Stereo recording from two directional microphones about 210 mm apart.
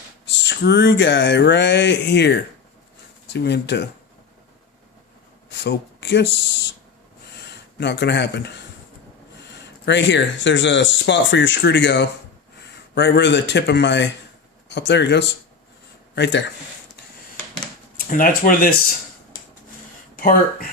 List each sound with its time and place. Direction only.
0.3 s speech: 60° left (ahead or behind)
5.5 s a sound: 55° left (ahead or behind)
7.3 s speech: 55° left (ahead or behind)
17.9 s speech: 40° left (ahead or behind)
20.1 s speech: 45° left (ahead or behind)